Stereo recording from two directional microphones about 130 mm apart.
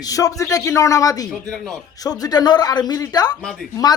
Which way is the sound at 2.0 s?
30° left (ahead or behind).